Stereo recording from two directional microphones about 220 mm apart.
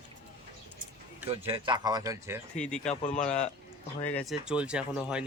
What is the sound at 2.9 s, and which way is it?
Speech, 35° left (ahead or behind).